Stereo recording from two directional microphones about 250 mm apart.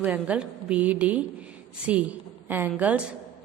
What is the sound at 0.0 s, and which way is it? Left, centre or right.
A woman's voice, centre.